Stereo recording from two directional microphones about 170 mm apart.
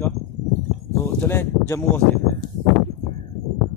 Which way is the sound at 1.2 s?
15° left (ahead or behind).